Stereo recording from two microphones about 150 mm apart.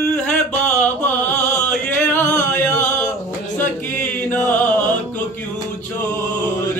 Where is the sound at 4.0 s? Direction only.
10° left (ahead or behind).